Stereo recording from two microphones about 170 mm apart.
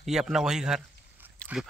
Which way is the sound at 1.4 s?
5° left (ahead or behind).